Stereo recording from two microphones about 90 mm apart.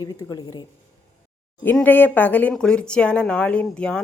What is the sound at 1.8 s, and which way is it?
Speech, 20° left (ahead or behind).